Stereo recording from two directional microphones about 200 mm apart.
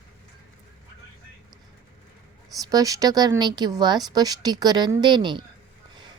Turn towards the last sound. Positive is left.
turn(degrees=-25)  # may be behind; listen again after turning